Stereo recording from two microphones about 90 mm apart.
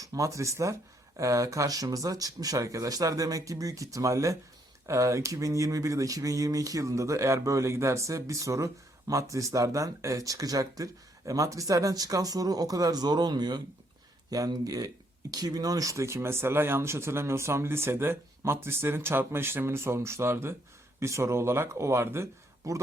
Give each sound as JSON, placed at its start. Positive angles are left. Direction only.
{"t": 0.0, "sound": "speech", "side_deg": -35}